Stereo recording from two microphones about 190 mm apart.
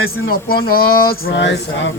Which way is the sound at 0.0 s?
50° left (ahead or behind).